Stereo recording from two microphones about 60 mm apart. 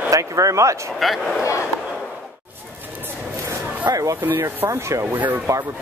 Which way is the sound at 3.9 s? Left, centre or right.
Right.